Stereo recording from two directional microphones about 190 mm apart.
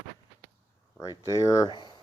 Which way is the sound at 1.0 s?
20° left (ahead or behind).